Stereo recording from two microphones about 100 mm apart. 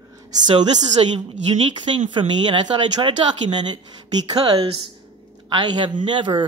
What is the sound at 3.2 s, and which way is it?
Speech, 75° right (ahead or behind).